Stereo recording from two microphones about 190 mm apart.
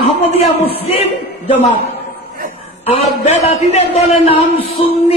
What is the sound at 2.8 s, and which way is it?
A man's voice, 35° left (ahead or behind).